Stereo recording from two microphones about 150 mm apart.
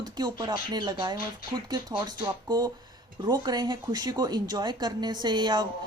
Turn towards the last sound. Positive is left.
turn(degrees=-30)  # may be behind; listen again after turning